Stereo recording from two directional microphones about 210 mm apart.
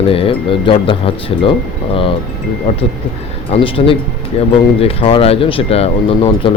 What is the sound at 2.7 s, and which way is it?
Speech, 30° left (ahead or behind).